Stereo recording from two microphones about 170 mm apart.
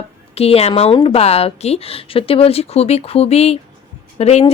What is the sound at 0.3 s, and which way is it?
A woman's voice, 35° left (ahead or behind).